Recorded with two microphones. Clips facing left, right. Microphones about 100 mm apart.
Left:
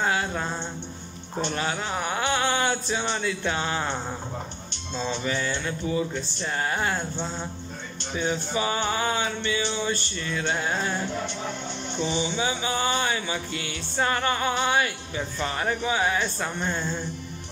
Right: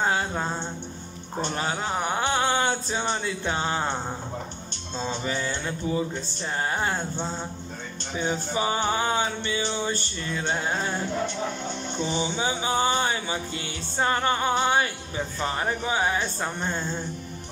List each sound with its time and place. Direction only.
0.0 s music: 30° right (ahead or behind)
4.9 s music: 40° right (ahead or behind)
8.2 s music: 30° right (ahead or behind)
12.0 s music: 45° right (ahead or behind)